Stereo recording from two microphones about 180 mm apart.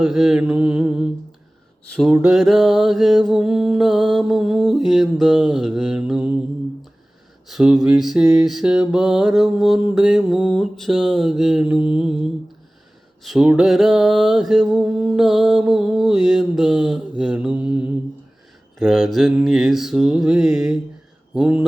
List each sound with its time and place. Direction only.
0.0 s mantra: 5° right (ahead or behind)
7.4 s mantra: 5° right (ahead or behind)